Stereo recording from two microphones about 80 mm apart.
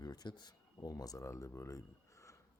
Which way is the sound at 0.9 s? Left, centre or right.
Left.